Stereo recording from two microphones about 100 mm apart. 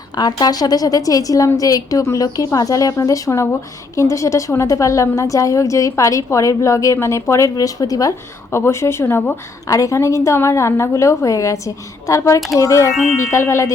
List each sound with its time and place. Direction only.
0.2 s a woman's voice: 40° left (ahead or behind); by 9.3 s 25° left (ahead or behind)
9.6 s a woman's voice: 35° left (ahead or behind)